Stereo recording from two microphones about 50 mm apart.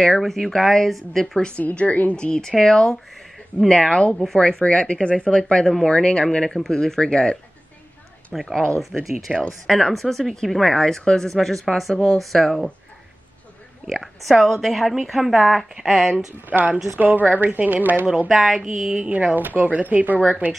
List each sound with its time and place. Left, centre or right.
0.2 s speech: centre
1.6 s a woman's voice: left
2.1 s speech: centre
4.4 s speech: centre
8.3 s speech: centre
9.7 s speech: centre
11.9 s speech: centre
12.2 s speech: centre
13.8 s speech: centre
15.8 s speech: centre
16.4 s speech: right
18.3 s speech: centre
18.9 s speech: right